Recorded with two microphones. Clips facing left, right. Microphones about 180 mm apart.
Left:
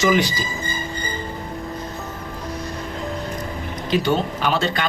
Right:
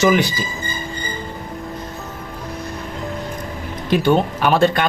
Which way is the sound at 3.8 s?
55° right (ahead or behind).